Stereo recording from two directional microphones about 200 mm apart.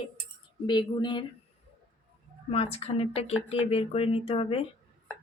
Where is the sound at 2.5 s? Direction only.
30° left (ahead or behind).